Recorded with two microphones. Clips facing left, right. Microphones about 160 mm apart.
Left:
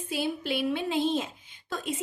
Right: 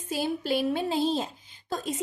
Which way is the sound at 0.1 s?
40° right (ahead or behind).